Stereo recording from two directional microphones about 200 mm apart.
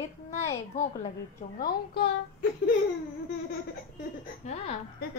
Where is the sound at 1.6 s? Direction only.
50° left (ahead or behind).